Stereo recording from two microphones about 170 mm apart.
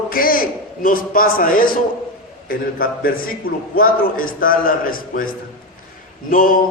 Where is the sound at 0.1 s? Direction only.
55° left (ahead or behind).